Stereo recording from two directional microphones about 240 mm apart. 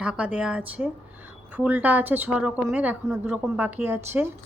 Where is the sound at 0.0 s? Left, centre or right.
Centre.